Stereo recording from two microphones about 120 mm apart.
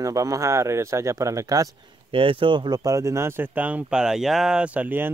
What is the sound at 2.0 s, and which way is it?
Speech, 50° right (ahead or behind).